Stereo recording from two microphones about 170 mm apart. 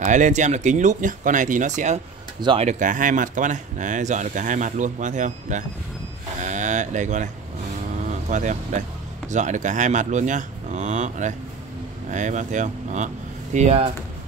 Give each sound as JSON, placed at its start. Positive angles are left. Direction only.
{"t": 0.0, "sound": "speech", "side_deg": -45}
{"t": 2.4, "sound": "speech", "side_deg": -35}
{"t": 6.4, "sound": "a sound", "side_deg": -45}
{"t": 8.1, "sound": "speech", "side_deg": -45}